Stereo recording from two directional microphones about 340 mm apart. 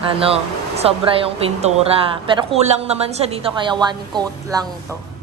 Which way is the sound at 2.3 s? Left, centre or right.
Centre.